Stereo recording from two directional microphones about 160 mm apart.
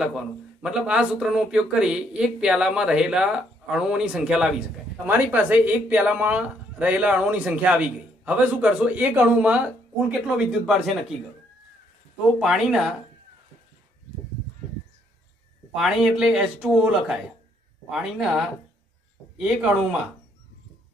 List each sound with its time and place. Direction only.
0.0 s speech: 5° right (ahead or behind)
12.4 s speech: centre (ahead or behind)
15.7 s speech: centre (ahead or behind)